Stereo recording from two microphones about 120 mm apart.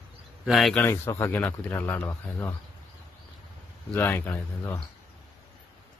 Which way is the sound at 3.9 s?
15° left (ahead or behind).